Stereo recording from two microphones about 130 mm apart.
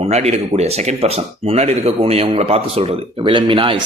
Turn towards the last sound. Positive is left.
turn(degrees=-40)  # may be behind; listen again after turning